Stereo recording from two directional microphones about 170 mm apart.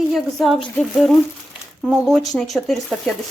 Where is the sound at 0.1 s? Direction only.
Centre (ahead or behind).